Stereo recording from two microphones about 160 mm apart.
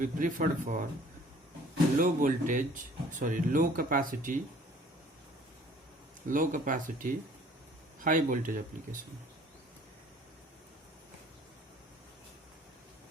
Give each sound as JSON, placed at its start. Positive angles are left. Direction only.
{"t": 0.0, "sound": "speech", "side_deg": -55}
{"t": 2.0, "sound": "speech", "side_deg": -55}
{"t": 6.2, "sound": "speech", "side_deg": -55}